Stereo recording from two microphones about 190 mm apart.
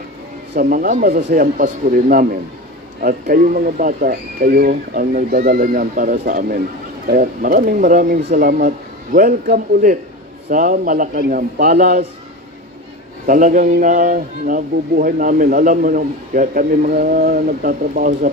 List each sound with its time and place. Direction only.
0.6 s a man's voice: 50° right (ahead or behind)
13.3 s a man's voice: 45° right (ahead or behind)